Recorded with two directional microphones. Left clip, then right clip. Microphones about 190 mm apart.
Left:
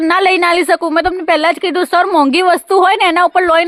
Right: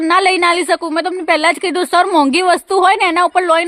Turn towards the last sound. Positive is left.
turn(degrees=10)  # may be behind; listen again after turning